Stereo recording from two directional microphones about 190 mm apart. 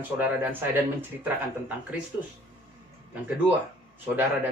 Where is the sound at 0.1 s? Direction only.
10° right (ahead or behind).